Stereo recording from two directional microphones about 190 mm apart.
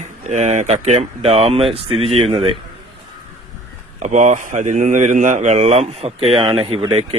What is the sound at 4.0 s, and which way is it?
A man's voice, 40° right (ahead or behind).